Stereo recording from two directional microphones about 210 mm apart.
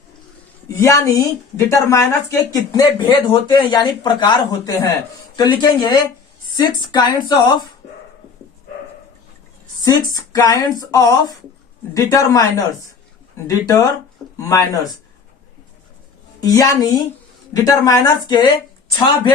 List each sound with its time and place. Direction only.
0.8 s speech: 15° left (ahead or behind)
9.8 s speech: 15° left (ahead or behind)
16.4 s speech: 15° left (ahead or behind)